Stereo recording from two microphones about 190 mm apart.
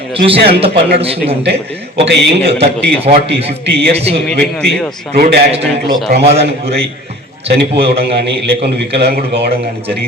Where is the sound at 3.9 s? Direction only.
30° right (ahead or behind).